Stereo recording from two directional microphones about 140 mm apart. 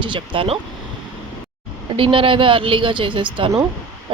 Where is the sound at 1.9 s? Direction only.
40° right (ahead or behind).